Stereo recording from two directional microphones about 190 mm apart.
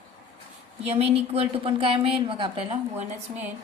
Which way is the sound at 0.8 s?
30° right (ahead or behind).